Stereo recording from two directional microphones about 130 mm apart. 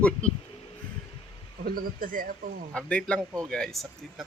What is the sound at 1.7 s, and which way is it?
Speech, 90° right.